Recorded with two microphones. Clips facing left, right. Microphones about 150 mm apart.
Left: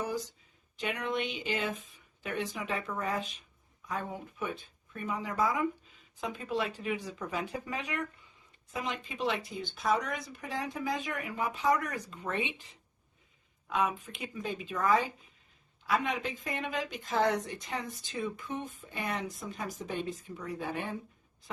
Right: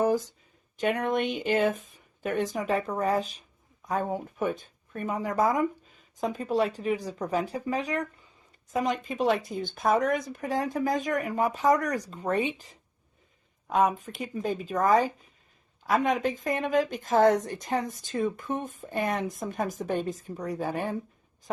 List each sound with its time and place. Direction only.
0.0 s speech: 50° right (ahead or behind)